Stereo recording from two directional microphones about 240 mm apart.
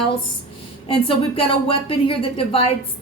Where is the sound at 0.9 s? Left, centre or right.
Left.